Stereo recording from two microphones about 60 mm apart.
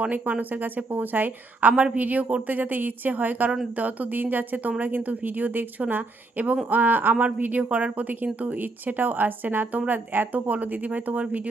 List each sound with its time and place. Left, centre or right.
0.0 s speech: right